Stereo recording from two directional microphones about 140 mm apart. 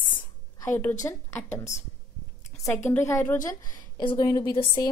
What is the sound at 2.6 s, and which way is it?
Speech, 15° left (ahead or behind).